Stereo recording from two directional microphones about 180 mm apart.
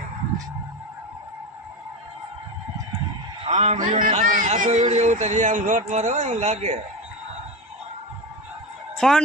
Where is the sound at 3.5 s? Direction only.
35° right (ahead or behind).